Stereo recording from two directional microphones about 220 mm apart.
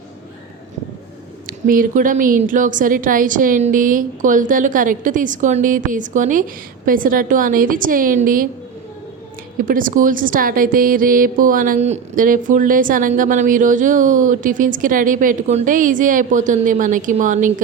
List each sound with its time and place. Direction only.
1.5 s speech: 40° right (ahead or behind)
9.6 s speech: 40° right (ahead or behind)